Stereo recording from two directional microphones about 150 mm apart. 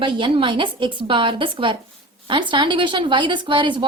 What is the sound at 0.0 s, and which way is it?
Speech, 35° right (ahead or behind).